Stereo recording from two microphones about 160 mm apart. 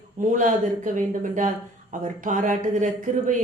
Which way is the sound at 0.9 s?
50° right (ahead or behind).